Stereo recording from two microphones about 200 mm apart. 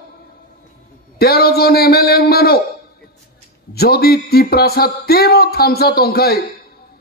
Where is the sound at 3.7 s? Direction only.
50° left (ahead or behind).